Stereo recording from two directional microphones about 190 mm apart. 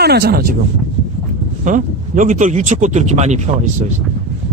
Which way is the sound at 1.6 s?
40° right (ahead or behind).